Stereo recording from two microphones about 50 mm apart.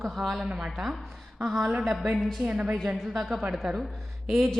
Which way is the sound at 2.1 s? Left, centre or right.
Centre.